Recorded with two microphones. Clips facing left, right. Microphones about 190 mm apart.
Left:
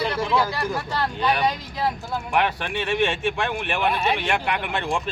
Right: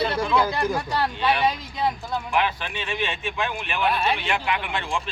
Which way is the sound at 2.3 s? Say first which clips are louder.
Left 3 dB; 60° left (ahead or behind).